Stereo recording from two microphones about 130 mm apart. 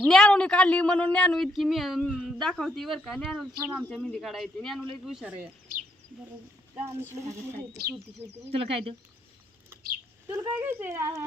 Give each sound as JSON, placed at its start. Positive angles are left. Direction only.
{"t": 0.0, "sound": "speech", "side_deg": 5}
{"t": 6.7, "sound": "speech", "side_deg": -15}
{"t": 8.4, "sound": "speech", "side_deg": -50}
{"t": 10.3, "sound": "speech", "side_deg": -20}